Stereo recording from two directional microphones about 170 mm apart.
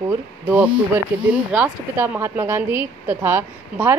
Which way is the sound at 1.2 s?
10° right (ahead or behind).